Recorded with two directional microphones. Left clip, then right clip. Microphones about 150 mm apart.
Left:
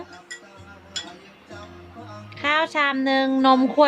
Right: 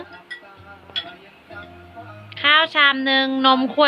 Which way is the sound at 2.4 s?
25° left (ahead or behind).